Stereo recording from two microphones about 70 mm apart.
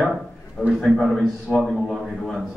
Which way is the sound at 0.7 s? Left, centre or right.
Centre.